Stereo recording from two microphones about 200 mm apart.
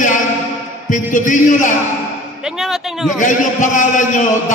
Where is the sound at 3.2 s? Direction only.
40° left (ahead or behind).